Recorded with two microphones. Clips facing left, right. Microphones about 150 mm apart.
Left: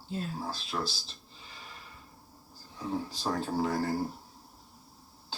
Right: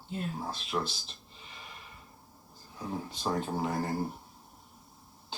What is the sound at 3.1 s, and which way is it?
Speech, 35° left (ahead or behind).